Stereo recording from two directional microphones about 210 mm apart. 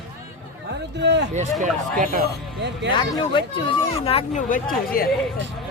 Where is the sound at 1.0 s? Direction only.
55° right (ahead or behind).